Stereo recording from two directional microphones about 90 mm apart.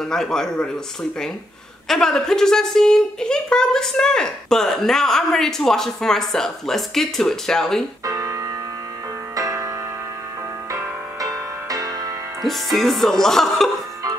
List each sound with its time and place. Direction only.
0.0 s a woman's voice: 5° left (ahead or behind)
1.9 s a woman's voice: 5° left (ahead or behind)
8.0 s music: 45° right (ahead or behind)
10.7 s music: 45° right (ahead or behind)
12.4 s a woman's voice: centre (ahead or behind)